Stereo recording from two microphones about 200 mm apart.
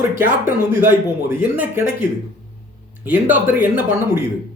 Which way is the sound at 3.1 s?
10° right (ahead or behind).